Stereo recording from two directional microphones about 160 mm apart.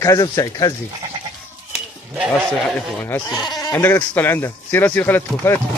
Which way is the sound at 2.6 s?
10° left (ahead or behind).